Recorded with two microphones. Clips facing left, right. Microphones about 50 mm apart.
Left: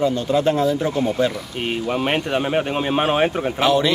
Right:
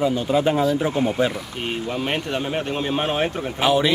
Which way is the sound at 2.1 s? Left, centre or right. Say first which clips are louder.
Left 4 dB; centre.